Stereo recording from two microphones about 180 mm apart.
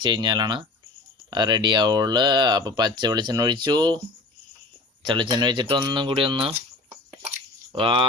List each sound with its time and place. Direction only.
0.0 s speech: 25° right (ahead or behind)
5.0 s speech: 25° right (ahead or behind)
7.7 s speech: 30° right (ahead or behind)